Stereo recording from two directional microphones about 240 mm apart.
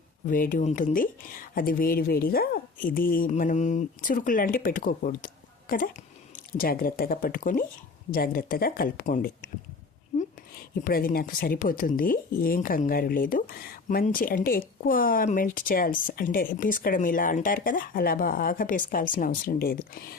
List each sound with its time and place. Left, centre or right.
0.3 s speech: left
10.8 s speech: left